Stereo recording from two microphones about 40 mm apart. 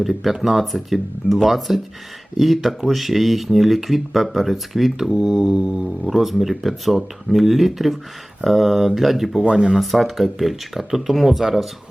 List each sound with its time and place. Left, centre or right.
0.0 s speech: centre
9.4 s speech: right
9.7 s speech: centre